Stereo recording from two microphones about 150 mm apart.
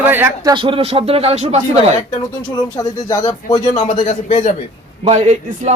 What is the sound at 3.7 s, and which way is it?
Speech, 50° left (ahead or behind).